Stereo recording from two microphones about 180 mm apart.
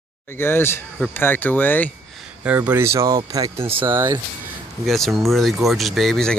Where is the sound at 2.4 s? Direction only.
10° right (ahead or behind).